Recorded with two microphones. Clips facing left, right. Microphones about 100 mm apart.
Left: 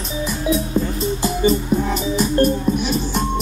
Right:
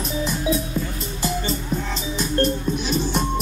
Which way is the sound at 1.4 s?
10° left (ahead or behind).